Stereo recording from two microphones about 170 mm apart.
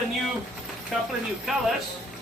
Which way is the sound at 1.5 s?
5° right (ahead or behind).